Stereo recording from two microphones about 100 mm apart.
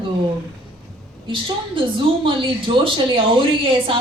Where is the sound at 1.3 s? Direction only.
60° right (ahead or behind).